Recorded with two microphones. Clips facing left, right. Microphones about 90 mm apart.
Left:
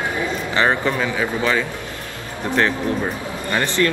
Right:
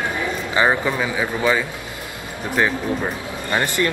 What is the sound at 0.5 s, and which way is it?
Speech, 10° right (ahead or behind).